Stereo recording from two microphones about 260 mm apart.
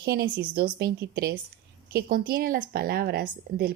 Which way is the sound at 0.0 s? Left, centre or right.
Right.